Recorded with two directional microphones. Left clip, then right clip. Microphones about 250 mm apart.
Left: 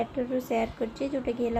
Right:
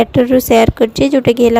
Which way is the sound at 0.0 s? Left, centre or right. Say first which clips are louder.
Right 19 dB; right.